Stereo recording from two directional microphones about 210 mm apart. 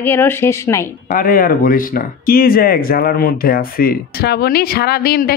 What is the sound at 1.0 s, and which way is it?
Speech, 45° left (ahead or behind).